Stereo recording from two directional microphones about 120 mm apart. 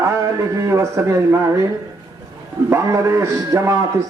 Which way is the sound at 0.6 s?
25° right (ahead or behind).